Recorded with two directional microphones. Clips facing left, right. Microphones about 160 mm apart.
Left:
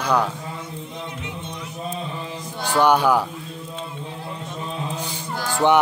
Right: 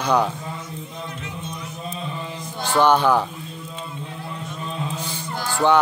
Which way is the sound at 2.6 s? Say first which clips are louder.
Even; 10° left (ahead or behind).